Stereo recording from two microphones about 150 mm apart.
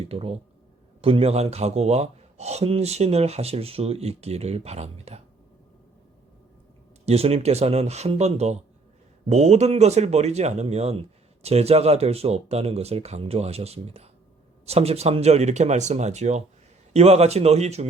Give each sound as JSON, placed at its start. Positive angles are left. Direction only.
{"t": 0.0, "sound": "speech", "side_deg": -40}
{"t": 7.0, "sound": "speech", "side_deg": -45}